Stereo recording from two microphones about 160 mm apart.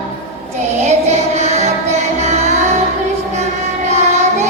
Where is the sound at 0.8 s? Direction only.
45° right (ahead or behind).